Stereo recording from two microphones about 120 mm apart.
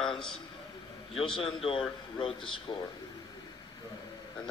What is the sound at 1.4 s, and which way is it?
Speech, 50° left (ahead or behind).